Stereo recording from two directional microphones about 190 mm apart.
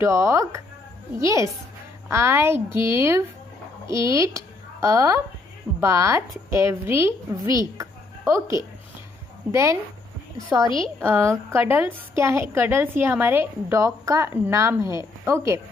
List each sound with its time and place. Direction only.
0.0 s a woman's voice: 15° right (ahead or behind)
9.5 s a woman's voice: 15° right (ahead or behind)
10.6 s a woman's voice: 25° left (ahead or behind)
11.0 s a woman's voice: 15° right (ahead or behind)